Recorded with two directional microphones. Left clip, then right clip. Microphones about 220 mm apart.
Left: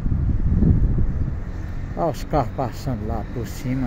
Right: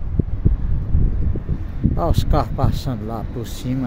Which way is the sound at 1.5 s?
35° left (ahead or behind).